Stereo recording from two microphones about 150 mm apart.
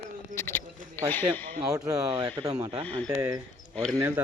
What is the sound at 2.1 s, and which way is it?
Speech, 35° right (ahead or behind).